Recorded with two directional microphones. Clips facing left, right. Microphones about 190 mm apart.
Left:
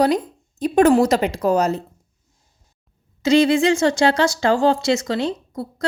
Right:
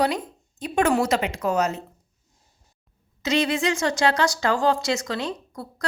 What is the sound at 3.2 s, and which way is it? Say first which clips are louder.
Speech: left 8 dB; 30° left (ahead or behind).